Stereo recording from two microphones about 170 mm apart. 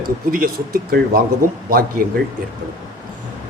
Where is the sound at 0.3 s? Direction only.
55° right (ahead or behind).